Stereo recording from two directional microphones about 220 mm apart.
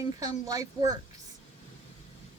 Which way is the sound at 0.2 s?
15° right (ahead or behind).